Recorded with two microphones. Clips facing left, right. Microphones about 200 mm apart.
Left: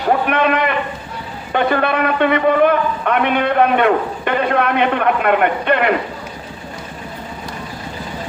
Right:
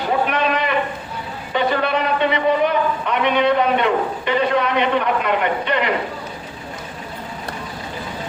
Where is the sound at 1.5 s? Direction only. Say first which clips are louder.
Left 3 dB; 55° left (ahead or behind).